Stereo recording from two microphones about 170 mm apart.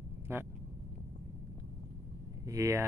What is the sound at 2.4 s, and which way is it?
Speech, 20° right (ahead or behind).